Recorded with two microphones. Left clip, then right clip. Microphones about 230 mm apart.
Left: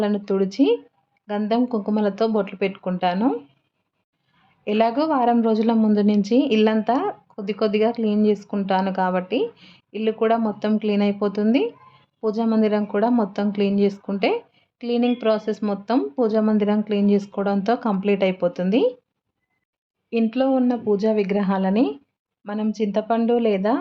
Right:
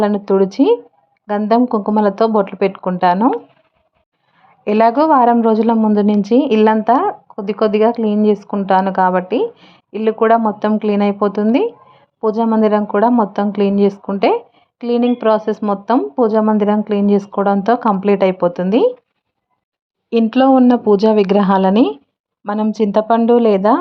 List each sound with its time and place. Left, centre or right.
0.0 s a woman's voice: centre
4.6 s a woman's voice: centre
20.1 s speech: right